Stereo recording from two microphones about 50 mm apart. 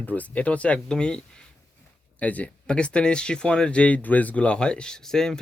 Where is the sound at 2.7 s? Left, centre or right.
Left.